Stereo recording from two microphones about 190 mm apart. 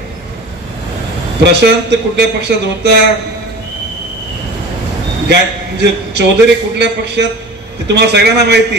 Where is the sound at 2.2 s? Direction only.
65° right (ahead or behind).